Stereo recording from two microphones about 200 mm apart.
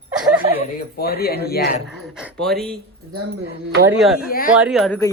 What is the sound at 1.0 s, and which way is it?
Speech, 50° left (ahead or behind).